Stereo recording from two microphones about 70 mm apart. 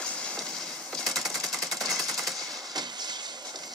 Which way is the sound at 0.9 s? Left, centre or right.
Centre.